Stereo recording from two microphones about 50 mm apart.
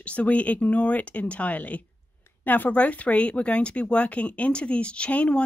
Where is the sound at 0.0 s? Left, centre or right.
Left.